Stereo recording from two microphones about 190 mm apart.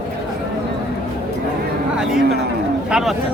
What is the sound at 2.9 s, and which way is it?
Speech, 5° right (ahead or behind).